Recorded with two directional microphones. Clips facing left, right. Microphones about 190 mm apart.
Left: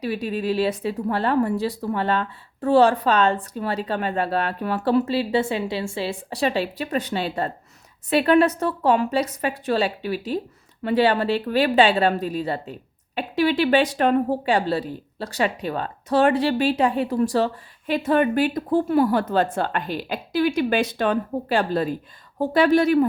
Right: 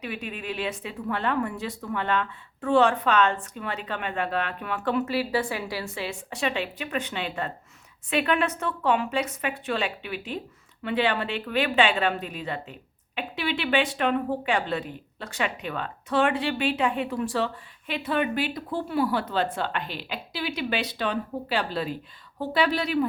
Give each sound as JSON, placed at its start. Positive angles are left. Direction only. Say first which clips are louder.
{"t": 0.0, "sound": "speech", "louder": "left 9 dB", "side_deg": 35}